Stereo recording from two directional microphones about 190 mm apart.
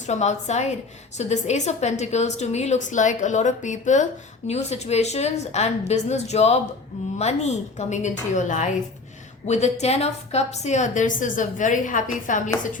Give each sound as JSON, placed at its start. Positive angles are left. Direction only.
{"t": 0.0, "sound": "a woman's voice", "side_deg": 35}